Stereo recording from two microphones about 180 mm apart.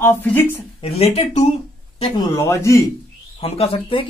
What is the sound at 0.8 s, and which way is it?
Speech, 30° left (ahead or behind).